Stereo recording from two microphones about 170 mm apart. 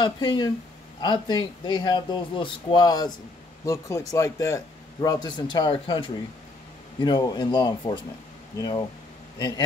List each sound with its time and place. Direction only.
0.0 s speech: 25° left (ahead or behind)